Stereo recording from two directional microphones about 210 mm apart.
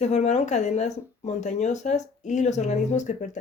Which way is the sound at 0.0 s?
35° left (ahead or behind).